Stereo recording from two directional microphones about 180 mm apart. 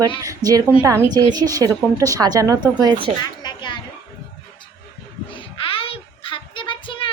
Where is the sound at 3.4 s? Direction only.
25° left (ahead or behind).